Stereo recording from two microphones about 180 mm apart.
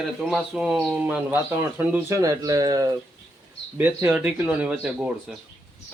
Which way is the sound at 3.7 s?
10° right (ahead or behind).